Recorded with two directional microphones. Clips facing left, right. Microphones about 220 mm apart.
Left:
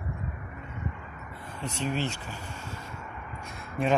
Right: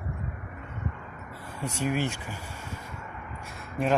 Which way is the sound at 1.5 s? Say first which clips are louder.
Right 2 dB; 10° right (ahead or behind).